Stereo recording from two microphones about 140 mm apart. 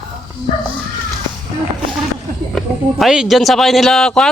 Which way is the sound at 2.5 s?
Centre (ahead or behind).